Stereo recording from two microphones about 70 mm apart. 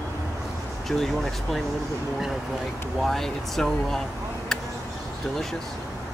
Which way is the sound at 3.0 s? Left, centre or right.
Centre.